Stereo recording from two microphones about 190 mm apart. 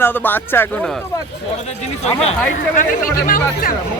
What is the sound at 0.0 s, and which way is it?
Speech, 10° left (ahead or behind).